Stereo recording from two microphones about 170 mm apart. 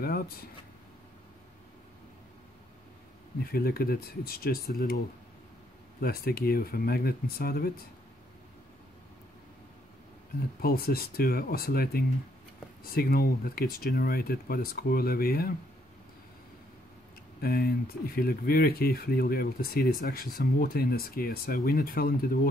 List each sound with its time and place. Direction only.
0.0 s speech: 60° left (ahead or behind)
3.4 s speech: 65° left (ahead or behind)
5.9 s speech: 60° left (ahead or behind)
10.6 s speech: 65° left (ahead or behind)
17.4 s speech: 65° left (ahead or behind)